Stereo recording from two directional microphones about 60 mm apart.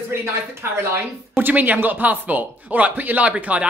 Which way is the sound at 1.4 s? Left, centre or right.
Right.